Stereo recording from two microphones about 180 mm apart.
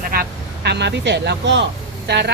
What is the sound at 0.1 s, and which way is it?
A woman's voice, 60° right (ahead or behind).